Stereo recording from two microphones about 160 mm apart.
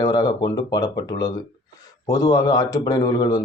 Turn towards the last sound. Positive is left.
turn(degrees=25)  # may be behind; listen again after turning